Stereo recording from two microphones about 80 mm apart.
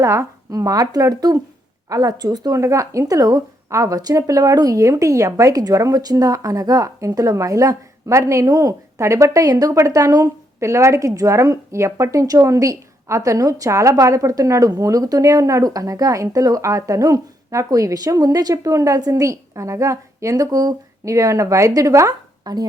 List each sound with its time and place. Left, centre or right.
0.0 s speech: right
2.6 s speech: right
22.5 s a woman's voice: right